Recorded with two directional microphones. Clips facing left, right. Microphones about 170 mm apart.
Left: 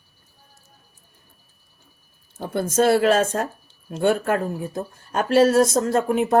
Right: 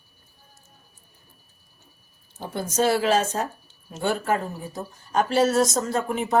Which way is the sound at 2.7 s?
55° left (ahead or behind).